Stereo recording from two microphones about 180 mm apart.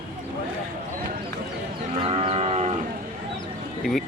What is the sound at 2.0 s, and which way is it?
Livestock, 35° right (ahead or behind).